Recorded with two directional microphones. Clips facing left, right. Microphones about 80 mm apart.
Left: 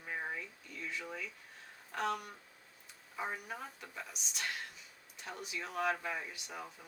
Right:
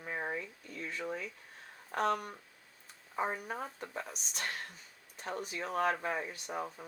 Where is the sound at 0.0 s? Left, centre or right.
Right.